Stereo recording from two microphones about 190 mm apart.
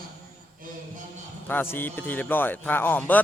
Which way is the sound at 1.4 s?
10° left (ahead or behind).